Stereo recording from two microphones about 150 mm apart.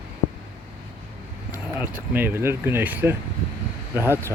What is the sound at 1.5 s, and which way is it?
Speech, 10° right (ahead or behind).